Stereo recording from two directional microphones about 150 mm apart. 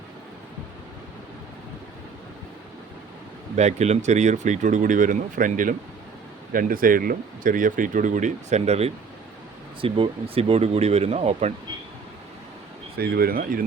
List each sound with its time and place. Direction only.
3.5 s speech: 50° right (ahead or behind)
13.0 s speech: 90° right; by 13.7 s 70° right (ahead or behind)